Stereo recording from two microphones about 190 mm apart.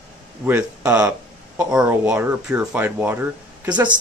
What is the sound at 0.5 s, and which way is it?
Speech, 15° right (ahead or behind).